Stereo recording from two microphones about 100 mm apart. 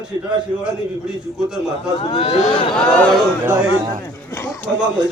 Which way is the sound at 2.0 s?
60° left (ahead or behind).